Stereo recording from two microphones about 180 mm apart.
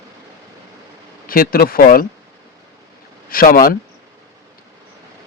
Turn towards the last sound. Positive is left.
turn(degrees=50)  # may be behind; listen again after turning